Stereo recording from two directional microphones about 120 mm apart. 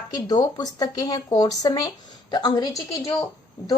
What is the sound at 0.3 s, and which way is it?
A woman's voice, 30° left (ahead or behind).